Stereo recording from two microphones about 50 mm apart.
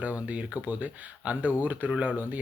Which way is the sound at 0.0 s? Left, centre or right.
Right.